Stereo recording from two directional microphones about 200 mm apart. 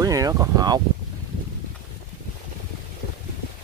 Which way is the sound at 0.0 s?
15° right (ahead or behind).